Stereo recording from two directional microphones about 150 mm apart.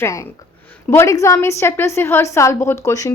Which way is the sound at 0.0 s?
20° left (ahead or behind).